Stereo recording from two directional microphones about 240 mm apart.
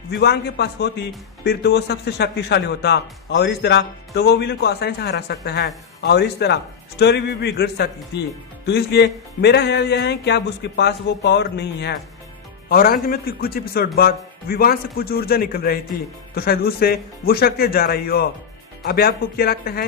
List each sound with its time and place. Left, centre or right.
0.1 s a man's voice: left